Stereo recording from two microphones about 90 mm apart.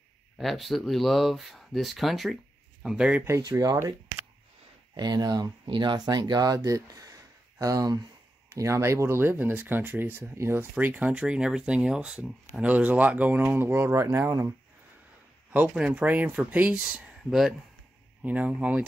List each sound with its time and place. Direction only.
0.4 s speech: centre (ahead or behind)
3.5 s speech: 35° right (ahead or behind)
4.9 s speech: 50° right (ahead or behind); by 14.0 s 30° right (ahead or behind)
15.7 s speech: 10° right (ahead or behind)
16.8 s speech: 10° right (ahead or behind)
18.2 s speech: 15° right (ahead or behind)